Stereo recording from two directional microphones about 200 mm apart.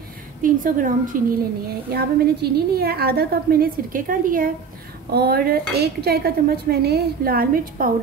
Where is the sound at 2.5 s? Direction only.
50° right (ahead or behind).